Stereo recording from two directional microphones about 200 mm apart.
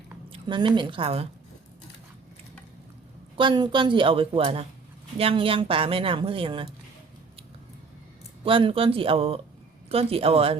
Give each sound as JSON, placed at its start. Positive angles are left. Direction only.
{"t": 0.3, "sound": "a woman's voice", "side_deg": -25}
{"t": 3.3, "sound": "speech", "side_deg": -25}
{"t": 8.4, "sound": "speech", "side_deg": -25}